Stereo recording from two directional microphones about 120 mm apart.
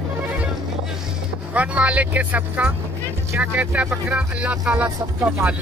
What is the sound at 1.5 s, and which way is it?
Speech, 10° right (ahead or behind).